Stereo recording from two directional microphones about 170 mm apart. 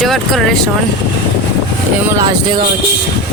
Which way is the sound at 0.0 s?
Centre (ahead or behind).